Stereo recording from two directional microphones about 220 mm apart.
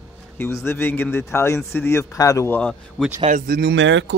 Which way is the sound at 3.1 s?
35° right (ahead or behind).